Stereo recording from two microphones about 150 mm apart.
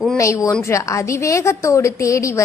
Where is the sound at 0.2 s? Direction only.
20° left (ahead or behind).